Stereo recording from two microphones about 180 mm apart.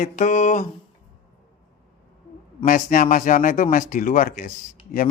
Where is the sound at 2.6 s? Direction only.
50° left (ahead or behind).